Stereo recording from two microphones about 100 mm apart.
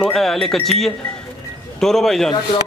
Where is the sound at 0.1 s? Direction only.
5° left (ahead or behind).